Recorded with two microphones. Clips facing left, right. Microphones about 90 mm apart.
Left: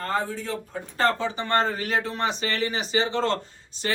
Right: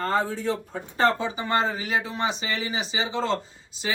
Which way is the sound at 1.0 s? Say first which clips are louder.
Right 1 dB; 15° right (ahead or behind).